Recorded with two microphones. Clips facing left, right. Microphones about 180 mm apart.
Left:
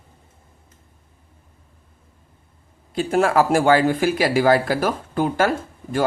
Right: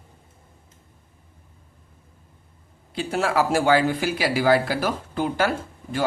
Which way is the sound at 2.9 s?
50° left (ahead or behind).